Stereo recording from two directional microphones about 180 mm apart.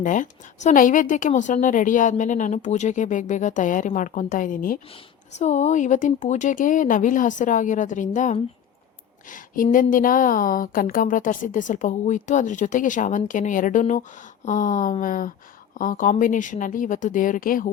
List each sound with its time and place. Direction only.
0.0 s a woman's voice: 45° left (ahead or behind)
5.4 s a woman's voice: 40° left (ahead or behind)
9.9 s a woman's voice: 50° left (ahead or behind)